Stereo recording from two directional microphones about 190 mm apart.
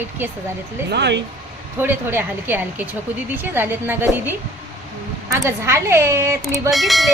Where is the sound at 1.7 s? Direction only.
10° right (ahead or behind).